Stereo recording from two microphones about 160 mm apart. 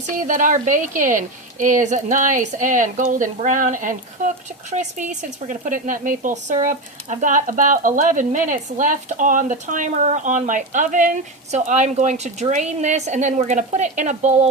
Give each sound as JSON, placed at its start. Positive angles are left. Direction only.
{"t": 0.2, "sound": "a woman's voice", "side_deg": -55}